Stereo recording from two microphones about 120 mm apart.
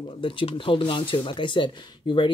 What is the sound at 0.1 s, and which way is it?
Speech, 45° left (ahead or behind).